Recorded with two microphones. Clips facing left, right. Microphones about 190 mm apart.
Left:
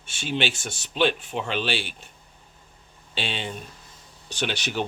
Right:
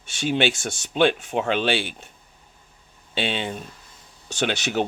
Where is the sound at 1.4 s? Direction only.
55° right (ahead or behind).